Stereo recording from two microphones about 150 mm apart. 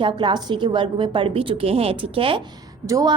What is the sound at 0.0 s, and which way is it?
A woman's voice, 35° right (ahead or behind).